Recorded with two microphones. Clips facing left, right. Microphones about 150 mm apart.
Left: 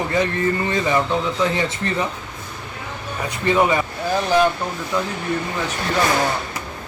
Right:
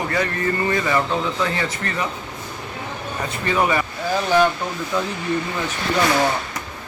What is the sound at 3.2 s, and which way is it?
Speech, 20° left (ahead or behind).